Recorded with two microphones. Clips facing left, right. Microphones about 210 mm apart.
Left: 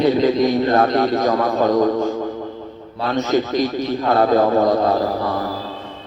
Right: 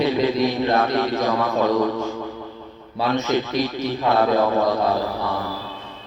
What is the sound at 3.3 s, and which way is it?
Speech, 40° left (ahead or behind).